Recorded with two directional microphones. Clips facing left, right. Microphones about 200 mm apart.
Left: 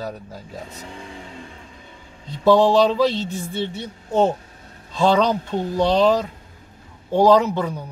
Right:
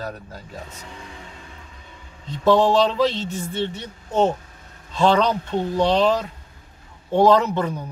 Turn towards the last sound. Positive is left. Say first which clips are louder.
# left 2 dB
turn(degrees=10)  # may be behind; listen again after turning